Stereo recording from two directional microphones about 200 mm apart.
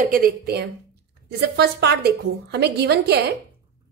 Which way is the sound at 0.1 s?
50° right (ahead or behind).